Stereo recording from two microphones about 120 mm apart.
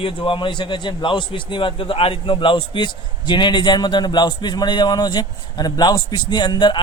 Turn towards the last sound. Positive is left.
turn(degrees=40)  # may be behind; listen again after turning